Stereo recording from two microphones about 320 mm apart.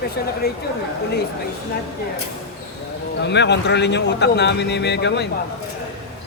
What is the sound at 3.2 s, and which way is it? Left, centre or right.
Speech, left.